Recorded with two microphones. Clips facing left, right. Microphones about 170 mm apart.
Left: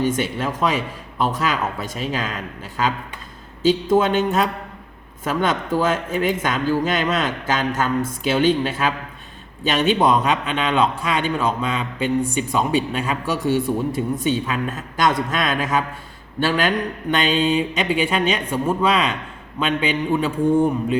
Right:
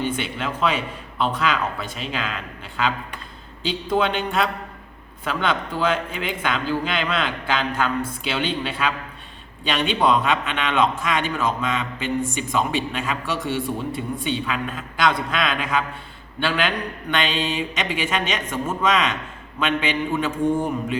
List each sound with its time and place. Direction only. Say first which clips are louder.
0.0 s a man's voice: left 4 dB; 40° left (ahead or behind)
3.9 s a man's voice: even; 45° left (ahead or behind)